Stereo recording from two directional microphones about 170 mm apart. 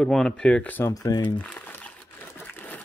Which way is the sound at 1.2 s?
10° left (ahead or behind).